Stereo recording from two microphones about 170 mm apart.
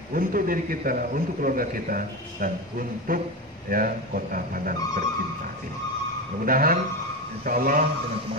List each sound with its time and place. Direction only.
0.1 s a man's voice: 55° right (ahead or behind)
6.4 s a man's voice: 55° right (ahead or behind)